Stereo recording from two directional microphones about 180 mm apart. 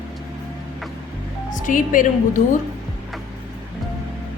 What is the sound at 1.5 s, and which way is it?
Speech, 45° left (ahead or behind).